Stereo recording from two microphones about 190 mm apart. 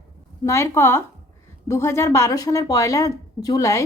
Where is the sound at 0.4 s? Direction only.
15° left (ahead or behind).